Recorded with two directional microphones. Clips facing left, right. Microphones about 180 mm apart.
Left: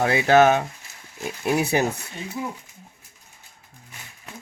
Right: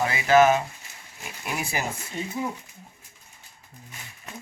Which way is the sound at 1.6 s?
65° left (ahead or behind).